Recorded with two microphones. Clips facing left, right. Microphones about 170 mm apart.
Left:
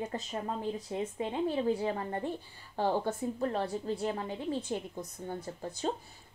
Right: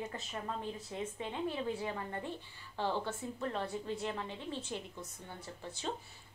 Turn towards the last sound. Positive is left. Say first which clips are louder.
# left 7 dB
turn(degrees=35)  # may be behind; listen again after turning